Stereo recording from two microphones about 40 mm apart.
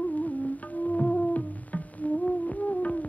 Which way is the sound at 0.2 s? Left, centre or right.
Left.